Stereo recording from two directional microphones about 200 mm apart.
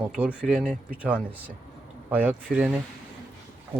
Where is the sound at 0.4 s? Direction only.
5° right (ahead or behind).